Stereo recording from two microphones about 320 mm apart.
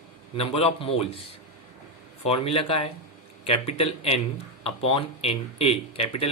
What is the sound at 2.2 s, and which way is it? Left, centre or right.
Speech, centre.